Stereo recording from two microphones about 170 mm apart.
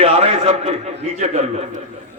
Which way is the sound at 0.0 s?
35° right (ahead or behind).